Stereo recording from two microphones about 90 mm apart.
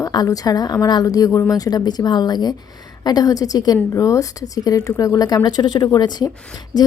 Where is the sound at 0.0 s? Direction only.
45° left (ahead or behind).